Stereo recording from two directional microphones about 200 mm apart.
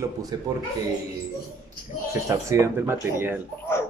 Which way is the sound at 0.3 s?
20° right (ahead or behind).